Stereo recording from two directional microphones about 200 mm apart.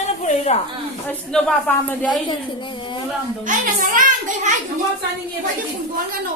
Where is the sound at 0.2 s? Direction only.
35° left (ahead or behind).